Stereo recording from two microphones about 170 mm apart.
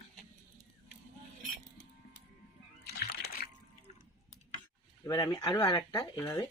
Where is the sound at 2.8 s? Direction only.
75° left (ahead or behind).